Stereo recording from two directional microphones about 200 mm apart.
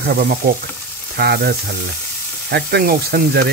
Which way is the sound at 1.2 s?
50° right (ahead or behind).